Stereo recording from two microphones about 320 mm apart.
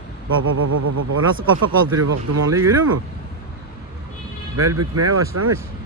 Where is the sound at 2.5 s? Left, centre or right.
Centre.